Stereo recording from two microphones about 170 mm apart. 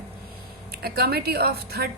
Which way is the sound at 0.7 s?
70° right (ahead or behind).